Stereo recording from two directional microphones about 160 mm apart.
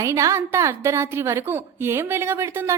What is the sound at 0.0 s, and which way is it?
A woman's voice, 20° right (ahead or behind).